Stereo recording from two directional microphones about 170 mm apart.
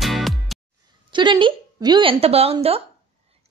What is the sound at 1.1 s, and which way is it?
A woman's voice, 25° right (ahead or behind).